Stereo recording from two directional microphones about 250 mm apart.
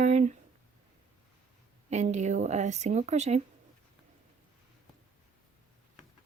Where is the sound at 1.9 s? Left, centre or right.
Right.